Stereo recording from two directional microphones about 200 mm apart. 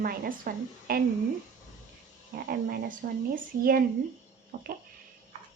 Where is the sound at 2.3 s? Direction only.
50° right (ahead or behind).